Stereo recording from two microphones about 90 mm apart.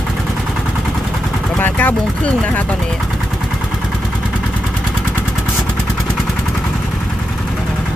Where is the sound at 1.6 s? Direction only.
20° left (ahead or behind).